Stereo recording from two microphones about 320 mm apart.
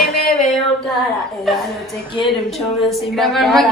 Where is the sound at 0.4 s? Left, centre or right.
Centre.